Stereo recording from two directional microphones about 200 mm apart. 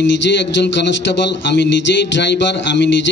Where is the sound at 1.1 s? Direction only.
60° left (ahead or behind).